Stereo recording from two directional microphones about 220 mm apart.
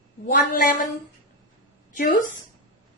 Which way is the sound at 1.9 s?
40° left (ahead or behind).